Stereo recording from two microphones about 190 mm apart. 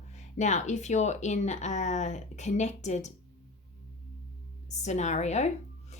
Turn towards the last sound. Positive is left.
turn(degrees=35)  # may be behind; listen again after turning